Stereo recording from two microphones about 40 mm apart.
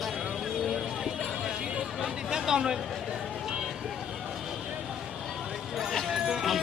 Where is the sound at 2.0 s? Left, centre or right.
Centre.